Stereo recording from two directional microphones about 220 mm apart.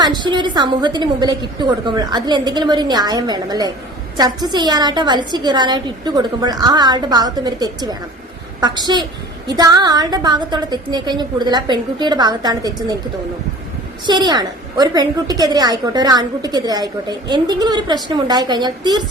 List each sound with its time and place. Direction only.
0.0 s a woman's voice: 20° right (ahead or behind)
14.1 s a woman's voice: 20° right (ahead or behind)